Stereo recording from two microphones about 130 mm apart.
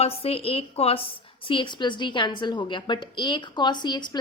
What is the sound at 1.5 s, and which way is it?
Speech, 40° left (ahead or behind).